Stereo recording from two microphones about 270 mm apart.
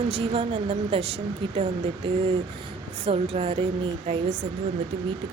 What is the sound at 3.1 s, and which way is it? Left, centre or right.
Speech, right.